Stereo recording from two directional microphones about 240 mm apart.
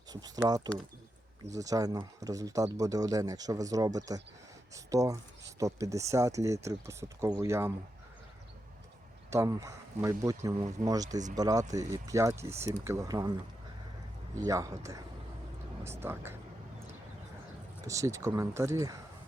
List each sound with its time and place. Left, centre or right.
0.1 s speech: centre
9.3 s speech: centre
14.3 s speech: centre
15.8 s speech: centre
17.8 s speech: centre